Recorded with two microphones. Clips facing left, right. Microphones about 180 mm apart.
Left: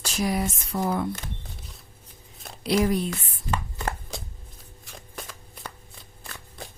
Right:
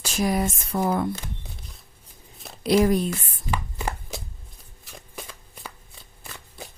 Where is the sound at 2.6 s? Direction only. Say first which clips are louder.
Right 4 dB; 45° right (ahead or behind).